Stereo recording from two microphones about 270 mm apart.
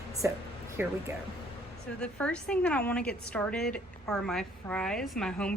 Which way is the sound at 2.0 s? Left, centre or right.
Centre.